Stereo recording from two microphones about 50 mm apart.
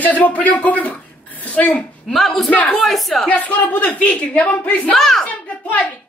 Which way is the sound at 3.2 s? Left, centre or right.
Left.